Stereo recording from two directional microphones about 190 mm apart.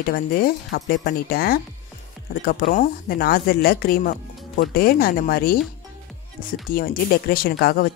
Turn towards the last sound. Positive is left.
turn(degrees=55)  # may be behind; listen again after turning